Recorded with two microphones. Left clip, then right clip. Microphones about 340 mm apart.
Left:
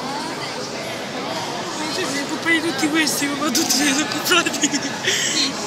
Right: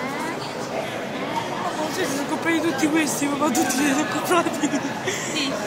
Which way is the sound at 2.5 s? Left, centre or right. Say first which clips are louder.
Left 2 dB; centre.